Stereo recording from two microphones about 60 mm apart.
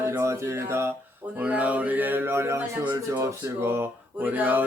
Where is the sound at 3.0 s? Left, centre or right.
Right.